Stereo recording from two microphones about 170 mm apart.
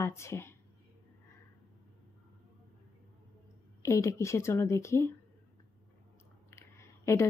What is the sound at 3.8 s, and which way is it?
Speech, 15° left (ahead or behind).